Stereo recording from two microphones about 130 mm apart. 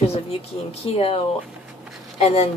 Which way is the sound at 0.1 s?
50° left (ahead or behind).